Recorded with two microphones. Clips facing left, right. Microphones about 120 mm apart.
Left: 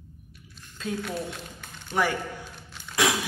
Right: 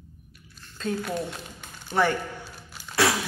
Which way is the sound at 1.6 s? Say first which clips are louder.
Right 2 dB; 10° right (ahead or behind).